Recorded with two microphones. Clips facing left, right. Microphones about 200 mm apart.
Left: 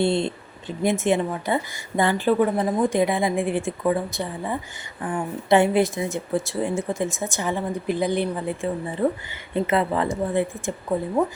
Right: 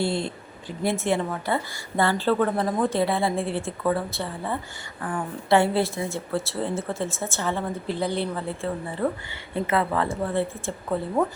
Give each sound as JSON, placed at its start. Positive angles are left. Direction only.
{"t": 0.0, "sound": "a woman's voice", "side_deg": 20}